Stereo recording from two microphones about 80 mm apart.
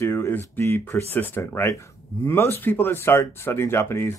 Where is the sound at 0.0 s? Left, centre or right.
Left.